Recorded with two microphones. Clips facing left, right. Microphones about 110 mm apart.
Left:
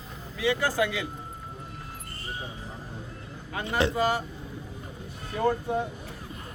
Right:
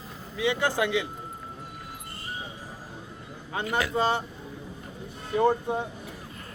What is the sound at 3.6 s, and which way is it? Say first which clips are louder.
Speech: left 2 dB; 30° left (ahead or behind).